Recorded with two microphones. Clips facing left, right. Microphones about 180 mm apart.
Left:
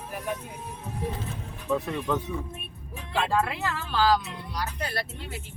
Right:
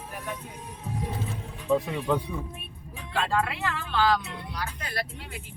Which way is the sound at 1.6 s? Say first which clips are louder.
Right 2 dB; 10° right (ahead or behind).